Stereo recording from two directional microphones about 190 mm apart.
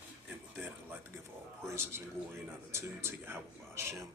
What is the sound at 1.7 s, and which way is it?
A man's voice, 15° right (ahead or behind).